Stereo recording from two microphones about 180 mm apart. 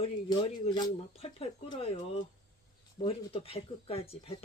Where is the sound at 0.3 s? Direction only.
25° left (ahead or behind).